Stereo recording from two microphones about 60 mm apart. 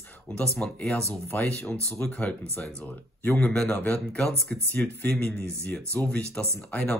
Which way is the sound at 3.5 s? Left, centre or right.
Centre.